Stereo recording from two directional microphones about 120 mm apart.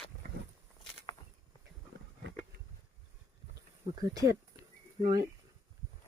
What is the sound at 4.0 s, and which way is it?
Speech, 30° right (ahead or behind).